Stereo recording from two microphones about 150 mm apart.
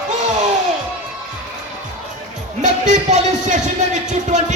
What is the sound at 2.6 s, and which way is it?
Music, 55° right (ahead or behind).